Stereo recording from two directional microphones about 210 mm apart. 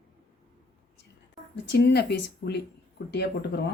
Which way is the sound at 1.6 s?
55° left (ahead or behind).